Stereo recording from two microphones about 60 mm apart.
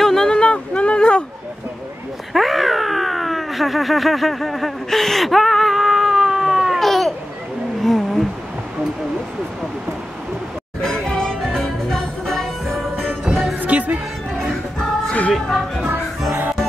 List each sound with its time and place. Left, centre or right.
0.0 s a sound: centre
2.3 s a sound: centre
7.8 s roaring cats: centre
10.8 s music: centre
13.6 s music: right
15.3 s music: centre
16.3 s fowl: right